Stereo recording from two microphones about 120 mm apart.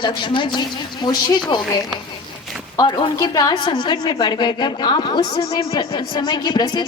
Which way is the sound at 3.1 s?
30° left (ahead or behind).